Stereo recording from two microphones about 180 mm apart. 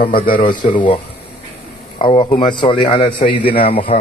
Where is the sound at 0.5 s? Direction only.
25° left (ahead or behind).